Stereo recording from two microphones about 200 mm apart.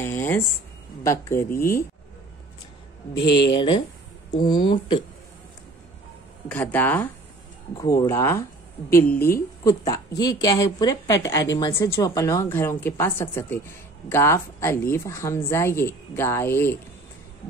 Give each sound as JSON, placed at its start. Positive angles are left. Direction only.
{"t": 0.0, "sound": "a sound", "side_deg": 10}
{"t": 1.0, "sound": "speech", "side_deg": 15}
{"t": 3.4, "sound": "speech", "side_deg": 25}
{"t": 6.5, "sound": "speech", "side_deg": 10}